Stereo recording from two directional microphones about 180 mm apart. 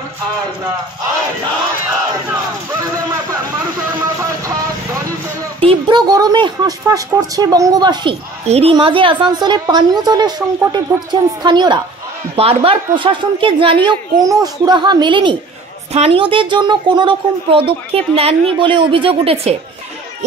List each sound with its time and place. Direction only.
5.6 s a woman's voice: 30° right (ahead or behind)